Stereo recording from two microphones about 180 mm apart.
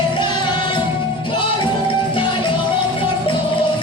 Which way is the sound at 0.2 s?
25° left (ahead or behind).